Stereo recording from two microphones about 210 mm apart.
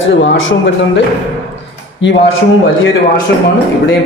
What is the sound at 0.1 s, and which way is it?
Speech, 65° left (ahead or behind).